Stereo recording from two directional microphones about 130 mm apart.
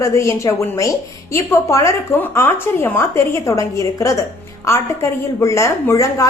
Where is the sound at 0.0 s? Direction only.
20° left (ahead or behind).